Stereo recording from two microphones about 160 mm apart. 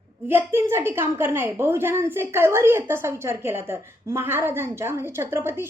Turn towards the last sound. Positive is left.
turn(degrees=-15)  # may be behind; listen again after turning